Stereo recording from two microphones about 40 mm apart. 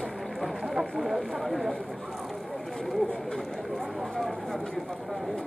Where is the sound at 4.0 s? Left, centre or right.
Centre.